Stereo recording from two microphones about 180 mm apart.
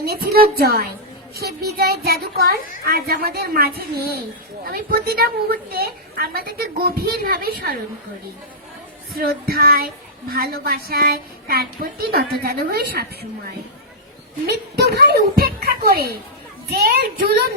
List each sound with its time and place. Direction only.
0.0 s a woman's voice: 55° right (ahead or behind)
9.1 s a woman's voice: 55° right (ahead or behind)
14.4 s a woman's voice: 65° right (ahead or behind)